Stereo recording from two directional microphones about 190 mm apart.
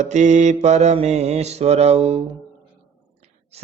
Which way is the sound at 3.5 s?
35° right (ahead or behind).